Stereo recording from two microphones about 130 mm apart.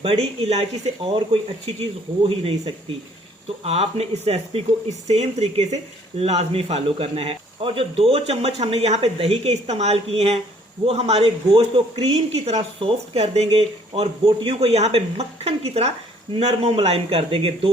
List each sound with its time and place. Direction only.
0.0 s speech: 50° right (ahead or behind)